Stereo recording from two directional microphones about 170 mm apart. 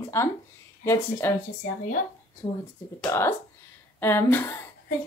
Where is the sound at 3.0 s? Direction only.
15° left (ahead or behind).